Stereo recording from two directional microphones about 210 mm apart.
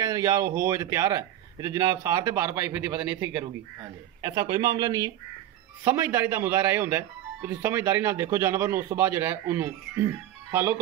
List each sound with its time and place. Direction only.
0.0 s speech: 15° right (ahead or behind)